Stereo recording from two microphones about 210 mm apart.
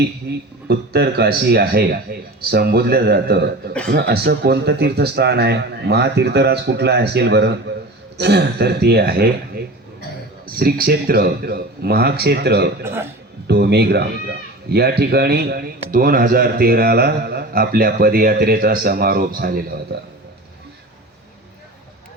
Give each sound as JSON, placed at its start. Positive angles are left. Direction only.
{"t": 0.7, "sound": "speech", "side_deg": -50}
{"t": 10.4, "sound": "speech", "side_deg": -45}
{"t": 12.8, "sound": "a man's voice", "side_deg": -10}
{"t": 13.5, "sound": "speech", "side_deg": -50}